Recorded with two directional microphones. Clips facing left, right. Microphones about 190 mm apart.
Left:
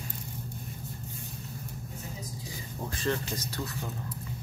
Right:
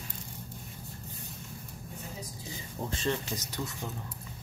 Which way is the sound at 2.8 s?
20° right (ahead or behind).